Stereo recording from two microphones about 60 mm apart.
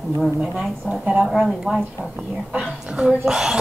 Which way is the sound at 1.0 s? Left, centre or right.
Right.